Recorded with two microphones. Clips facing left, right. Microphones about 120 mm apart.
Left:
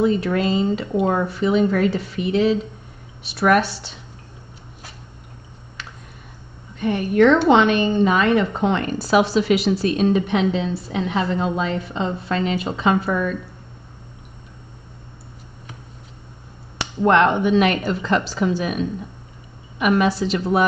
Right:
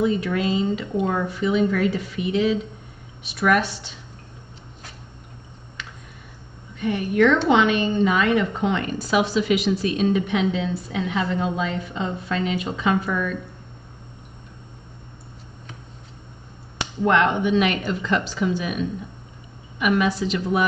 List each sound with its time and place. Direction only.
0.0 s a woman's voice: 40° left (ahead or behind)
6.8 s a woman's voice: 40° left (ahead or behind)
17.0 s a woman's voice: 40° left (ahead or behind)